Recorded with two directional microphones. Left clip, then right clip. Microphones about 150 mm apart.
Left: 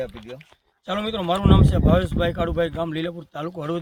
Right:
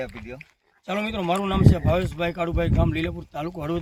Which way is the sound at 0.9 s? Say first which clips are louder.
Left 1 dB; centre (ahead or behind).